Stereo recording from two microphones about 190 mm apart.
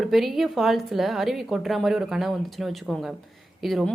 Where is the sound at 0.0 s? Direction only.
Centre (ahead or behind).